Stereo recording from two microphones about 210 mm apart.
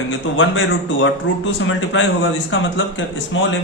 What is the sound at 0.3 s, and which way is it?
Speech, 65° left (ahead or behind).